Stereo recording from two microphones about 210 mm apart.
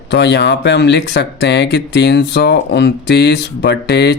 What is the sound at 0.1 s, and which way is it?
Speech, 55° left (ahead or behind).